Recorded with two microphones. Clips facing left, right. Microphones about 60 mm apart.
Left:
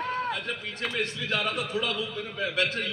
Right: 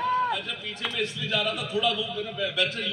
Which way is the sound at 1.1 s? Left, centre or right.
Left.